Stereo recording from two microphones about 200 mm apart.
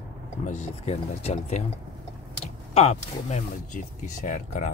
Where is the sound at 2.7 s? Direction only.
35° left (ahead or behind).